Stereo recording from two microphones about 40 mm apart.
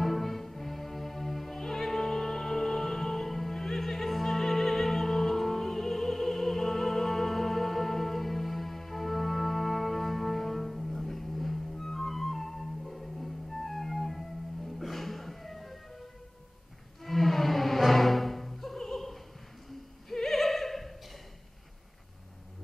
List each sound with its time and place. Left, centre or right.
0.0 s music: centre
17.0 s music: centre
20.1 s opera: centre